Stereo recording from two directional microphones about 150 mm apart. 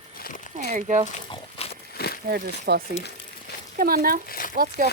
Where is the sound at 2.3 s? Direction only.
90° right.